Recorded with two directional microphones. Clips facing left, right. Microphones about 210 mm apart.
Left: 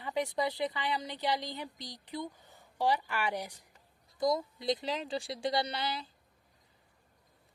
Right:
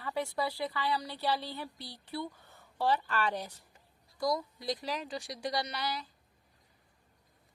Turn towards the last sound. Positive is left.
turn(degrees=25)  # may be behind; listen again after turning